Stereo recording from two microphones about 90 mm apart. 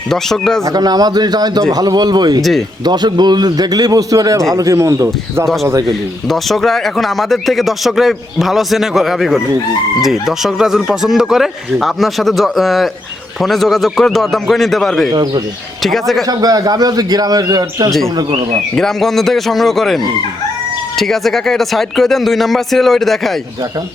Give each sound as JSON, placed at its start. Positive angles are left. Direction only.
{"t": 0.1, "sound": "speech", "side_deg": 5}
{"t": 0.6, "sound": "a man's voice", "side_deg": -45}
{"t": 2.4, "sound": "speech", "side_deg": 0}
{"t": 2.8, "sound": "a man's voice", "side_deg": -50}
{"t": 6.2, "sound": "speech", "side_deg": 5}
{"t": 15.1, "sound": "a man's voice", "side_deg": -50}
{"t": 15.8, "sound": "speech", "side_deg": 0}
{"t": 16.2, "sound": "a man's voice", "side_deg": -45}
{"t": 18.2, "sound": "speech", "side_deg": -65}
{"t": 18.8, "sound": "speech", "side_deg": 5}